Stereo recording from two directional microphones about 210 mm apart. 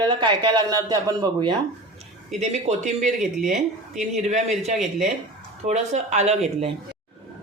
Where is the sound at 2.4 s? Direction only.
30° right (ahead or behind).